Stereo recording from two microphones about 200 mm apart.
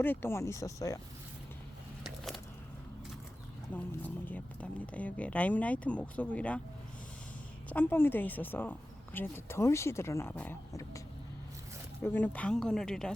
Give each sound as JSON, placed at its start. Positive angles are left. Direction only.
{"t": 0.0, "sound": "speech", "side_deg": 10}
{"t": 3.7, "sound": "speech", "side_deg": 10}
{"t": 7.7, "sound": "speech", "side_deg": 10}
{"t": 12.0, "sound": "speech", "side_deg": 10}